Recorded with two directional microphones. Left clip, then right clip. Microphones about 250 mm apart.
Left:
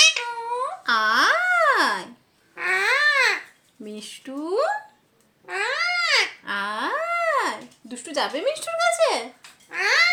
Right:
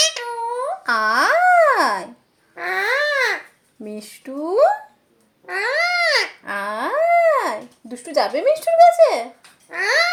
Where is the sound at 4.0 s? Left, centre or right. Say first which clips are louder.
Right 4 dB; centre.